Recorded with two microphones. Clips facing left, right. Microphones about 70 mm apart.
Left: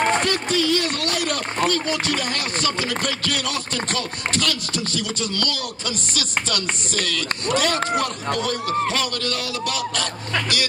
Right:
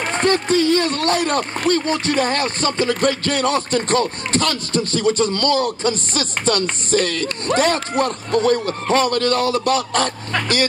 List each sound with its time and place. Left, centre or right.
0.2 s speech: right
1.7 s music: right